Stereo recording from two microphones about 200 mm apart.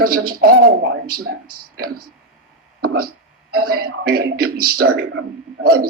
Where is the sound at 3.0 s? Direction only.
50° right (ahead or behind).